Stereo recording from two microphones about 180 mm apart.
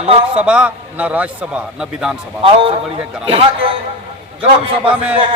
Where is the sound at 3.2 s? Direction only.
30° right (ahead or behind).